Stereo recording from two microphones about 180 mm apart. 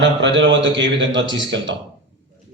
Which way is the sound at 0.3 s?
90° right.